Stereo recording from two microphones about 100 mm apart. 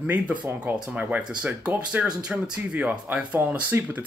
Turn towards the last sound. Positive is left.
turn(degrees=-15)  # may be behind; listen again after turning